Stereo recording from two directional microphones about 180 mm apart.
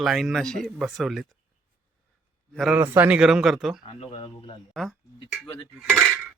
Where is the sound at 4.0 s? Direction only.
30° left (ahead or behind).